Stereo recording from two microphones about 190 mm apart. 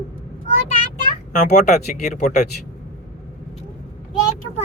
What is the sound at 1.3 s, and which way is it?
Speech, 40° left (ahead or behind).